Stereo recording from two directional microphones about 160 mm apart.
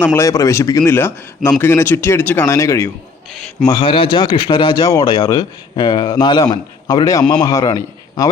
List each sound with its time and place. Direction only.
0.0 s speech: 15° left (ahead or behind)
3.7 s a man's voice: 30° left (ahead or behind)